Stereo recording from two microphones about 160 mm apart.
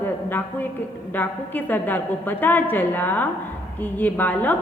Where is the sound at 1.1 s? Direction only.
10° left (ahead or behind).